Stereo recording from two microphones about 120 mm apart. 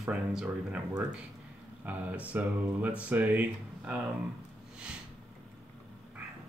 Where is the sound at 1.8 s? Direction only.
15° right (ahead or behind).